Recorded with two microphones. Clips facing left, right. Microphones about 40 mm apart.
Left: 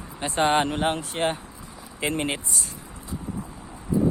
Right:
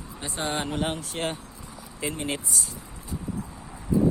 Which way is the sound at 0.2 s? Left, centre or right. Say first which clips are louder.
Left 9 dB; left.